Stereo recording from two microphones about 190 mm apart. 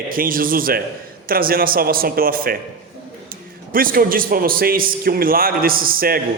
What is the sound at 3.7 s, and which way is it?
Speech, 50° right (ahead or behind).